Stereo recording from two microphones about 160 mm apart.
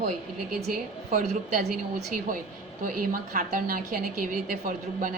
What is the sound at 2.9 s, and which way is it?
A woman's voice, 60° right (ahead or behind).